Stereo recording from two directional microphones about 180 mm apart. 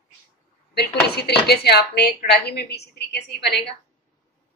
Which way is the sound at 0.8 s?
65° left (ahead or behind).